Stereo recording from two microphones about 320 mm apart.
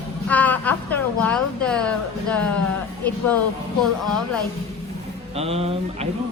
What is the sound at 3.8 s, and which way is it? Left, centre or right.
Speech, centre.